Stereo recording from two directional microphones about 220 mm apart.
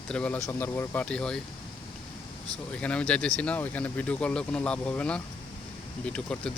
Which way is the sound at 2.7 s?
5° left (ahead or behind).